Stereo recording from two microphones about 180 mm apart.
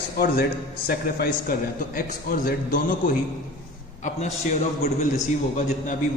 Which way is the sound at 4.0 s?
40° left (ahead or behind).